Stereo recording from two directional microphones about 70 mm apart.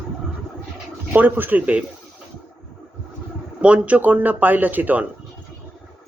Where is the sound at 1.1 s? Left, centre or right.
Right.